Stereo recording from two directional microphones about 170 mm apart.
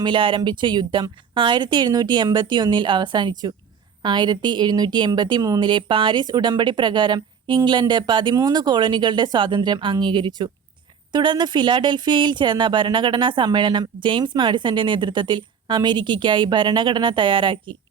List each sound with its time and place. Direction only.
0.0 s a woman's voice: 30° right (ahead or behind)